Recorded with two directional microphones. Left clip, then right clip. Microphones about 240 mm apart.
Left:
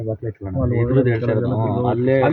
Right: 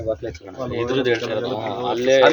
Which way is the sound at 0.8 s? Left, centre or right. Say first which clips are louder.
Even; right.